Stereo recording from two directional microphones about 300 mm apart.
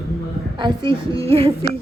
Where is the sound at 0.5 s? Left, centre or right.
Centre.